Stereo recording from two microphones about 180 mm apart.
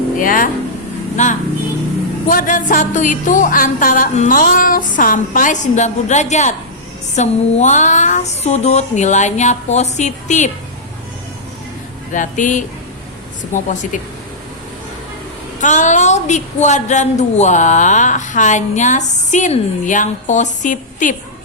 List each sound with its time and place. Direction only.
0.2 s a woman's voice: 50° left (ahead or behind)
12.1 s a woman's voice: 45° left (ahead or behind)
15.6 s a woman's voice: 45° left (ahead or behind)